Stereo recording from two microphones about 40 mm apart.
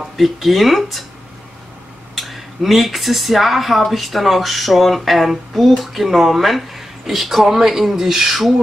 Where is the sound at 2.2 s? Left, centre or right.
Centre.